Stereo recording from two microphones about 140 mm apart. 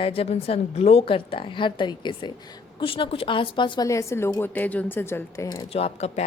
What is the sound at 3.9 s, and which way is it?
A woman's voice, 20° left (ahead or behind).